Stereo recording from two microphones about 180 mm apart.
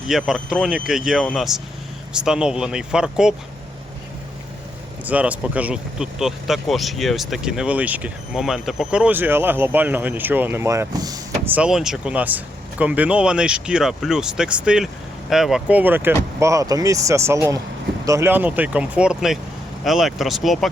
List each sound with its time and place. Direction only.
0.1 s speech: centre (ahead or behind)
5.0 s speech: 10° right (ahead or behind)
11.5 s speech: 5° right (ahead or behind)